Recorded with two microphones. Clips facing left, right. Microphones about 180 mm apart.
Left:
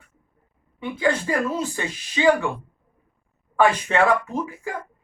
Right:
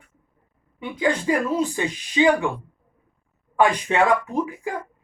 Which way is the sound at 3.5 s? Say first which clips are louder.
Even; 15° right (ahead or behind).